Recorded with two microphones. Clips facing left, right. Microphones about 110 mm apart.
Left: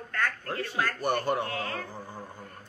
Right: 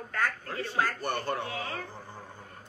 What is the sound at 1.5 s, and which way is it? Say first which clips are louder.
Speech: left 2 dB; 50° left (ahead or behind).